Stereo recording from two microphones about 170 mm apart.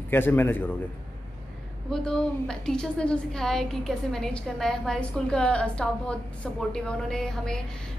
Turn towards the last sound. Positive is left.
turn(degrees=5)  # may be behind; listen again after turning